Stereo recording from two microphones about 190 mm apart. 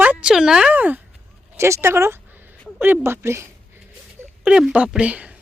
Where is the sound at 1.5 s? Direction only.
15° right (ahead or behind).